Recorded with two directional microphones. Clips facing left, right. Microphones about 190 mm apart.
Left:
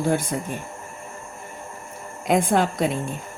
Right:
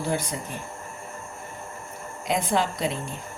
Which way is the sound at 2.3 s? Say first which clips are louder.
Left 5 dB; 50° left (ahead or behind).